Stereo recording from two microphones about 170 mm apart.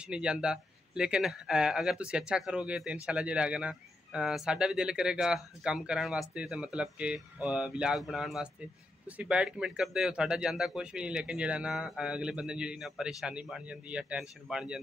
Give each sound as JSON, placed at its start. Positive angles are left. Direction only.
{"t": 0.0, "sound": "speech", "side_deg": -5}